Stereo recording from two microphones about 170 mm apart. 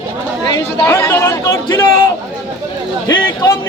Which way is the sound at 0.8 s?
15° left (ahead or behind).